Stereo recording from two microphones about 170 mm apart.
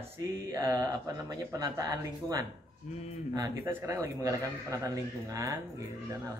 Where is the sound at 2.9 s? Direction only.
45° left (ahead or behind).